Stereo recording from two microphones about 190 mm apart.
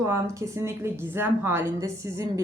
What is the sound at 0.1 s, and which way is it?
A woman's voice, 15° right (ahead or behind).